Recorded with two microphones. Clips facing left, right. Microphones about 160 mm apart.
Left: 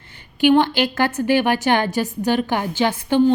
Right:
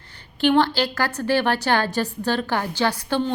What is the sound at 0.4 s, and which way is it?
A woman's voice, 15° left (ahead or behind).